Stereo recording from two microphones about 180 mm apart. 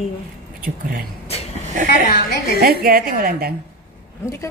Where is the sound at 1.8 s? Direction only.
50° left (ahead or behind).